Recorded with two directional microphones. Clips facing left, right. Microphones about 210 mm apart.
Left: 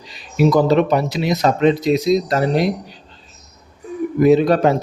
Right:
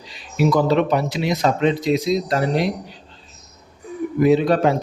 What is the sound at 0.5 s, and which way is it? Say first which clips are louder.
Speech: left 2 dB; 40° left (ahead or behind).